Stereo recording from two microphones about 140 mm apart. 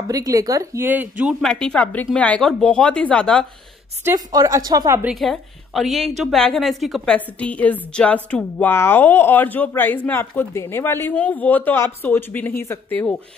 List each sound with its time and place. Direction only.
0.1 s a woman's voice: 25° right (ahead or behind)
1.4 s a woman's voice: 5° left (ahead or behind)
4.0 s a woman's voice: 25° right (ahead or behind)
5.0 s a woman's voice: centre (ahead or behind)